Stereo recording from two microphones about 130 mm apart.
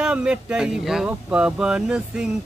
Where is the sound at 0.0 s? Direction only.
5° right (ahead or behind).